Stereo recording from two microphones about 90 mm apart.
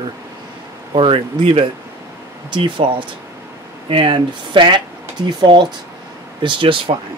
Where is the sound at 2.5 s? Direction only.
65° right (ahead or behind).